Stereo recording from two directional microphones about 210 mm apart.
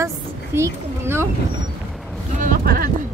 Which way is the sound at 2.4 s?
40° right (ahead or behind).